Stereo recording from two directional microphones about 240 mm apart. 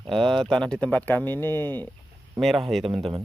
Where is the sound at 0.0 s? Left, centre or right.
Right.